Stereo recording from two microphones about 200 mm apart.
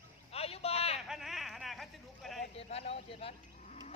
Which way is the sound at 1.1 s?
Centre (ahead or behind).